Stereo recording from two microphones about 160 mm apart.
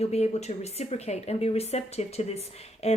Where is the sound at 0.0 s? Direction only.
40° left (ahead or behind).